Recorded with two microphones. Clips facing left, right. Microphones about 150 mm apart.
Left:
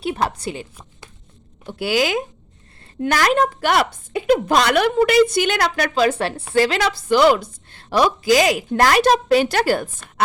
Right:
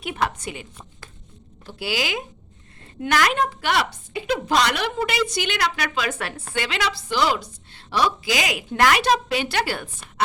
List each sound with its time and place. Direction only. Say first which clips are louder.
0.0 s a woman's voice: left 4 dB; 35° left (ahead or behind)
1.8 s a woman's voice: left 7 dB; 50° left (ahead or behind)